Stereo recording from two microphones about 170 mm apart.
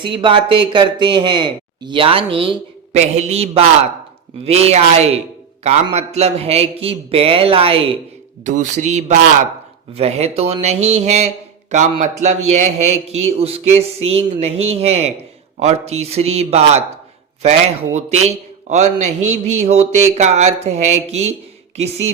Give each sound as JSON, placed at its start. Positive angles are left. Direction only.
{"t": 0.0, "sound": "a man's voice", "side_deg": -30}
{"t": 8.4, "sound": "a man's voice", "side_deg": -45}
{"t": 17.9, "sound": "a man's voice", "side_deg": -40}